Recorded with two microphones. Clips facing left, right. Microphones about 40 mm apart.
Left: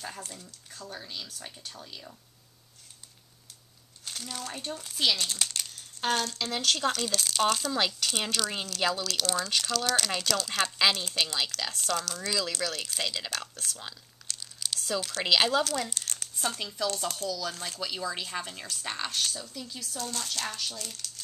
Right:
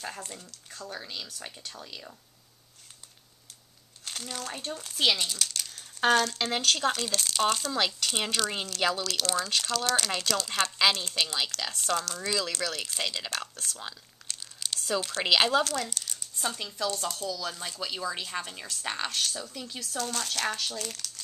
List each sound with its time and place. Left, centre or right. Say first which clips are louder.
0.0 s speech: right 2 dB; centre
4.0 s crumpling: right 1 dB; centre
4.6 s speech: right 1 dB; centre
5.0 s speech: right 2 dB; right
5.4 s a sound: even; centre
5.9 s speech: right 5 dB; right
6.6 s speech: left 1 dB; centre
19.3 s speech: right 2 dB; right
19.8 s speech: right 4 dB; right